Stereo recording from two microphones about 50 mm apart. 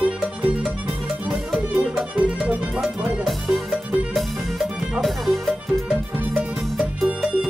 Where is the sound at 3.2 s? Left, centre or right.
Centre.